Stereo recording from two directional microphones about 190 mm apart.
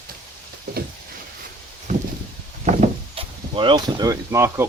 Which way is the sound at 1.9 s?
40° right (ahead or behind).